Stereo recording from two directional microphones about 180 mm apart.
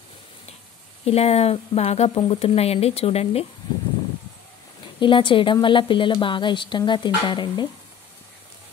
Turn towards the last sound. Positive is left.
turn(degrees=25)  # may be behind; listen again after turning